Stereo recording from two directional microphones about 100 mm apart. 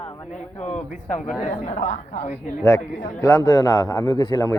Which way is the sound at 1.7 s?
90° left.